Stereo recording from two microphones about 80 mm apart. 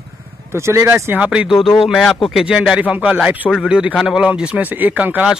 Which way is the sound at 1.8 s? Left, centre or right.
Centre.